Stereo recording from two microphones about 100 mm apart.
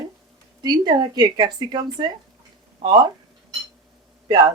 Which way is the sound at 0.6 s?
45° right (ahead or behind).